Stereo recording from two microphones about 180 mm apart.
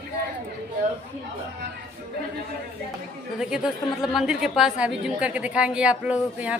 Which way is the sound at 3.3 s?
5° right (ahead or behind).